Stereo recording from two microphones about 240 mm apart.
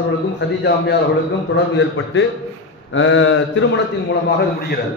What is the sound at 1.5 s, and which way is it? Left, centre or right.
A man's voice, left.